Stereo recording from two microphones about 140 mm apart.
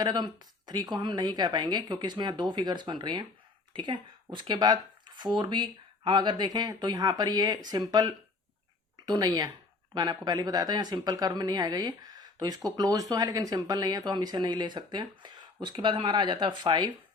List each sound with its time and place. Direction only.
0.0 s speech: 30° right (ahead or behind)